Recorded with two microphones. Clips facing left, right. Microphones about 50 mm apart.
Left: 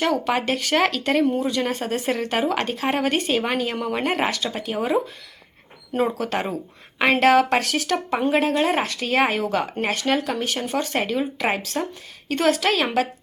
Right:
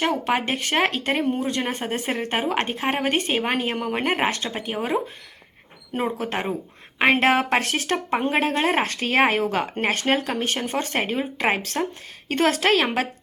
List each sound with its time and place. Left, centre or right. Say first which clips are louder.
0.0 s speech: left 1 dB; right
6.1 s speech: left 1 dB; right